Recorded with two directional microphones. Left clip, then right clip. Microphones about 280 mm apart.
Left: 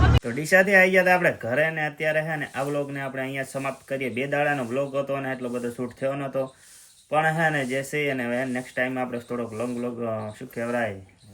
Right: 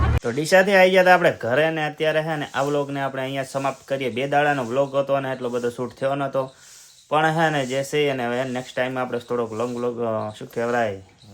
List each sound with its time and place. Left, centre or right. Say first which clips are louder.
0.3 s speech: right 3 dB; centre